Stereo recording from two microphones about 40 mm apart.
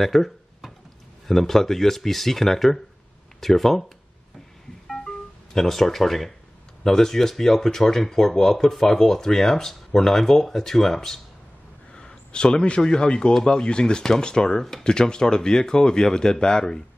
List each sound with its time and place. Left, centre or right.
0.0 s a sound: centre
1.2 s speech: centre
5.0 s music: centre
5.7 s speech: centre
11.9 s speech: left